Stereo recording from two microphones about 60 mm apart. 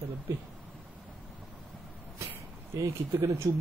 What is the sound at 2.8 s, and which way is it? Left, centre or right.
Speech, right.